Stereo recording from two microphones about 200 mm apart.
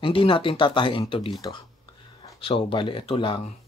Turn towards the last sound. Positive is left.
turn(degrees=25)  # may be behind; listen again after turning